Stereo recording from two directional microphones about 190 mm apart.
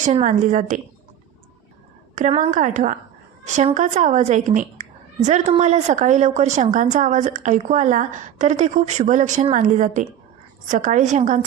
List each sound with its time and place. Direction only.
0.0 s a woman's voice: 40° right (ahead or behind)
2.1 s a woman's voice: 40° right (ahead or behind)